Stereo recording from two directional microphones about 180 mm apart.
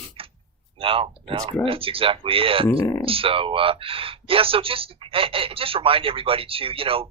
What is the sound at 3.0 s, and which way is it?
Speech, 30° right (ahead or behind).